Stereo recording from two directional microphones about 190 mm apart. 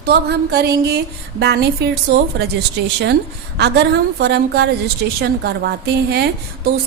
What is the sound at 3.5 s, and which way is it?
A woman's voice, 65° right (ahead or behind).